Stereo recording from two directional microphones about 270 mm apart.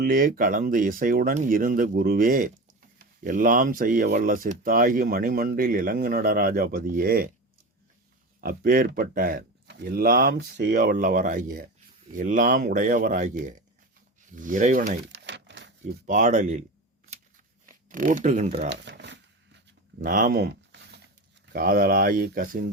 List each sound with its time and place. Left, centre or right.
0.0 s speech: right
8.4 s speech: right
14.2 s a sound: right
16.0 s speech: right
17.7 s speech: right
18.7 s shuffling cards: right
20.0 s speech: right